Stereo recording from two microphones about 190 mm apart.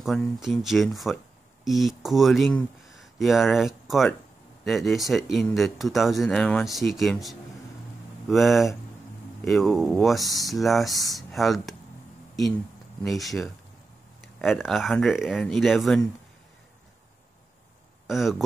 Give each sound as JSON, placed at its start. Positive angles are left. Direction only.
{"t": 0.0, "sound": "speech", "side_deg": 0}
{"t": 13.0, "sound": "speech", "side_deg": 0}
{"t": 18.0, "sound": "speech", "side_deg": 0}